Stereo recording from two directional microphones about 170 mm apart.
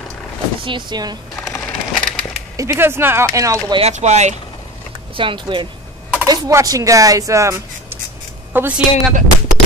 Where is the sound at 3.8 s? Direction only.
40° right (ahead or behind).